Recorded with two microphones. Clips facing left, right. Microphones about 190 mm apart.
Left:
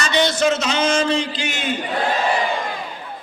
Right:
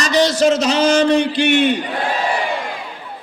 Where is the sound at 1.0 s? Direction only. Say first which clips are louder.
Right 7 dB; 60° right (ahead or behind).